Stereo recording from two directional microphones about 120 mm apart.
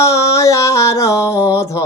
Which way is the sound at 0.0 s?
25° left (ahead or behind).